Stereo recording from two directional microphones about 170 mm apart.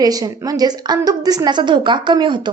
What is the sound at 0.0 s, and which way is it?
A woman's voice, 20° right (ahead or behind).